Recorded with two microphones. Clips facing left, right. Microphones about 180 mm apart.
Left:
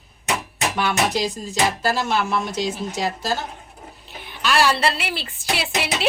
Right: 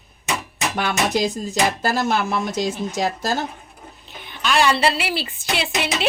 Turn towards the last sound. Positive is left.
turn(degrees=5)  # may be behind; listen again after turning